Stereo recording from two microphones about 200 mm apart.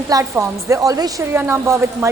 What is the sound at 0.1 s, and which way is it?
A woman's voice, 15° right (ahead or behind).